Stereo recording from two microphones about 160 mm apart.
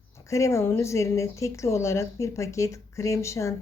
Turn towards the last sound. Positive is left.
turn(degrees=20)  # may be behind; listen again after turning